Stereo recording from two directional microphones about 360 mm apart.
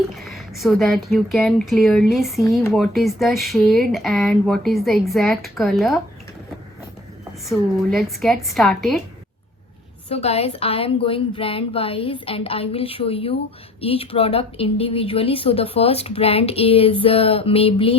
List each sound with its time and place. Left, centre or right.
0.1 s speech: centre
7.9 s speech: centre
10.1 s a woman's voice: centre